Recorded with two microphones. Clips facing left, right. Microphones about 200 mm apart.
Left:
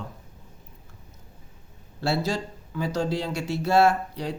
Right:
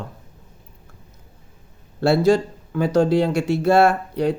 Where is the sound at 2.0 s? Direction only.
55° right (ahead or behind).